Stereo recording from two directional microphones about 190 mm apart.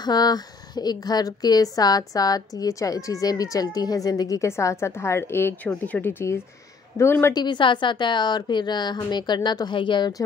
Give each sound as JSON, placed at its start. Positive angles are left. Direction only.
{"t": 0.0, "sound": "a woman's voice", "side_deg": 20}